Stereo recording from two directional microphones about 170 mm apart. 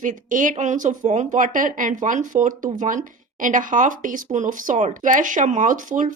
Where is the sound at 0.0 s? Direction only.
50° right (ahead or behind).